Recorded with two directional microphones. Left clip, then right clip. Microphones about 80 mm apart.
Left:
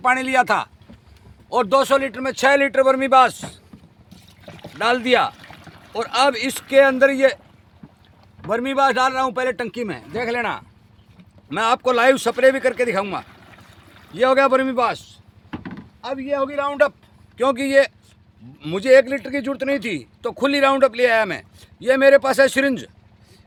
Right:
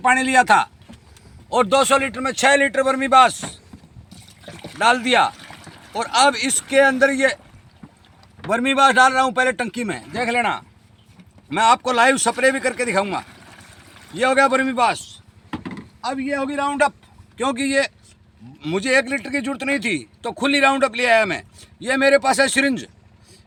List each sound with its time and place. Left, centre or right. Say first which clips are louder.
0.0 s a man's voice: right 2 dB; left
4.1 s trickle: right 2 dB; centre
4.8 s speech: right 2 dB; left
5.4 s a sound: right 2 dB; centre
5.9 s speech: right 2 dB; left
8.4 s a man's voice: right 2 dB; left
16.1 s a man's voice: left 3 dB; centre; by 22.9 s left